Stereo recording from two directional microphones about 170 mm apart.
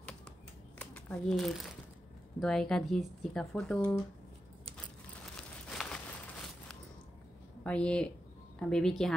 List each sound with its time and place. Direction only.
0.7 s crumpling: 5° left (ahead or behind)
2.4 s speech: 5° left (ahead or behind)
5.3 s crumpling: 5° left (ahead or behind)
7.6 s speech: 5° left (ahead or behind)